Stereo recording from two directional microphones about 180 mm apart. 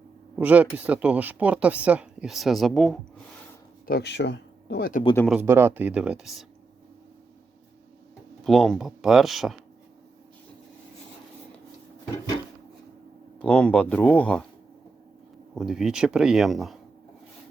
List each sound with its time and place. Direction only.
0.3 s speech: 10° right (ahead or behind)
3.8 s speech: 65° left (ahead or behind)
5.3 s speech: 10° right (ahead or behind)
8.4 s speech: centre (ahead or behind)
13.4 s speech: 5° left (ahead or behind)
15.5 s speech: centre (ahead or behind)